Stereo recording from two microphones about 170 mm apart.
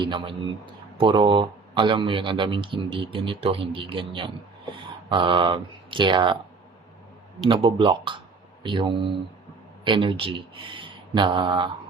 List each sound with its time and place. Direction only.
0.0 s speech: 30° right (ahead or behind)
7.4 s speech: 30° right (ahead or behind)